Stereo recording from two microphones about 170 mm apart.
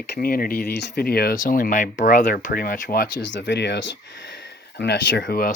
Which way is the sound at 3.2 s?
90° left.